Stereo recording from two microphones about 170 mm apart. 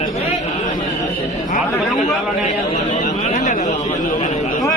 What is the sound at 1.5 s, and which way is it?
Speech, 50° left (ahead or behind).